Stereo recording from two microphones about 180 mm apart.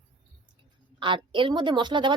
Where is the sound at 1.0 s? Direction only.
30° right (ahead or behind).